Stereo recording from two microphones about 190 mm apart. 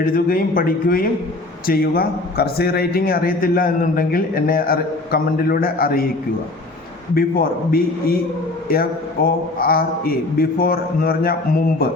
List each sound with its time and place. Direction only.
0.0 s a man's voice: 50° left (ahead or behind)
7.1 s a man's voice: 50° left (ahead or behind)